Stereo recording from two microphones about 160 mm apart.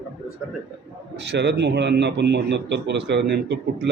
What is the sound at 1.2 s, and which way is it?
A man's voice, 90° right.